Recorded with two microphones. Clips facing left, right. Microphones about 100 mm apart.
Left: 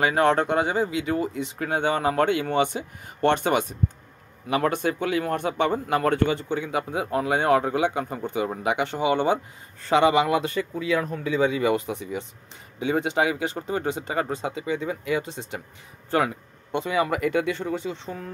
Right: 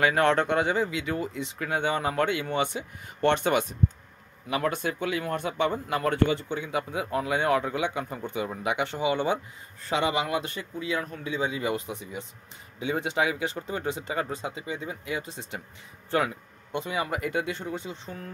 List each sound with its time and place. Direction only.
0.0 s speech: 35° left (ahead or behind)
4.5 s a man's voice: 50° left (ahead or behind); by 12.3 s 75° left (ahead or behind)
12.8 s a man's voice: 55° left (ahead or behind)
16.1 s a man's voice: 45° left (ahead or behind)
16.7 s speech: 90° left